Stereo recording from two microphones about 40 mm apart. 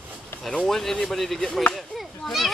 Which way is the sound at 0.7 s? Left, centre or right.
Centre.